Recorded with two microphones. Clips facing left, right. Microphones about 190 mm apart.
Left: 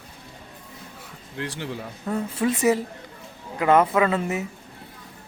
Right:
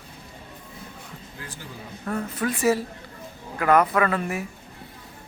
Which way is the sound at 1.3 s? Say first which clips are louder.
Left 12 dB; 80° left.